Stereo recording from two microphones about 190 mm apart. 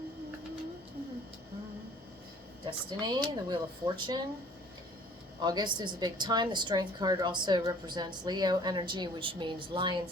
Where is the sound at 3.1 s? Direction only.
25° right (ahead or behind).